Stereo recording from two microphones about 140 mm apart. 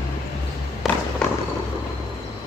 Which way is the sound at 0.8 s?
5° right (ahead or behind).